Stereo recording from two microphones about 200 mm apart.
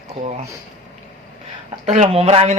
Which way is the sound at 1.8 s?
35° right (ahead or behind).